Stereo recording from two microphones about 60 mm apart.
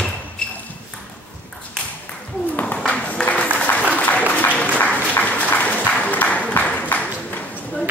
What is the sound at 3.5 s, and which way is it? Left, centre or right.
Applause, left.